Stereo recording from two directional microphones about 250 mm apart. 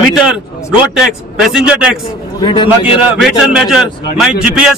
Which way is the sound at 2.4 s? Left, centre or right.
Centre.